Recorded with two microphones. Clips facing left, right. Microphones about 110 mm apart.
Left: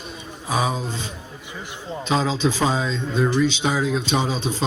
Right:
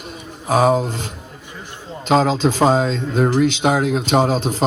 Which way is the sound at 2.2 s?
50° right (ahead or behind).